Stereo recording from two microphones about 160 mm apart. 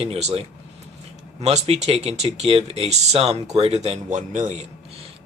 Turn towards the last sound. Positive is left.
turn(degrees=-50)  # may be behind; listen again after turning